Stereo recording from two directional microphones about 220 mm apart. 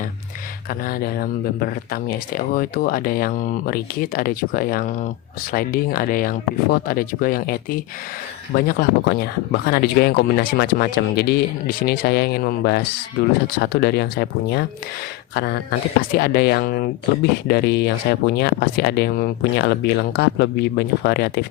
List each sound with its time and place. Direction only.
0.7 s speech: 40° left (ahead or behind)
16.1 s speech: 45° left (ahead or behind)